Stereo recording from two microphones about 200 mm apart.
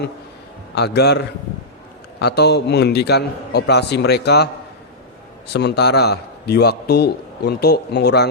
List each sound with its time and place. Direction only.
0.8 s a man's voice: 55° left (ahead or behind)
5.5 s a man's voice: 55° left (ahead or behind)